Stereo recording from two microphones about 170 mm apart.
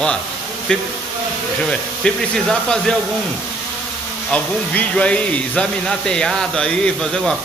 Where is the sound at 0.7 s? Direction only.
5° left (ahead or behind).